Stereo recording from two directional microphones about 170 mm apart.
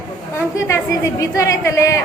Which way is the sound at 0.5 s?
15° left (ahead or behind).